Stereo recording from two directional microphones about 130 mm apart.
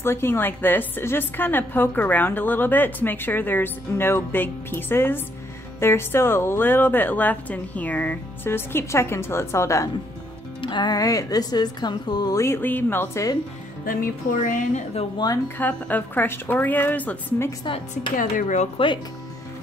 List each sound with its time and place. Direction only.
0.0 s a woman's voice: 20° left (ahead or behind)
10.6 s a woman's voice: 35° left (ahead or behind)
13.8 s speech: 90° left
15.4 s a woman's voice: 15° left (ahead or behind)
18.1 s speech: 75° left (ahead or behind)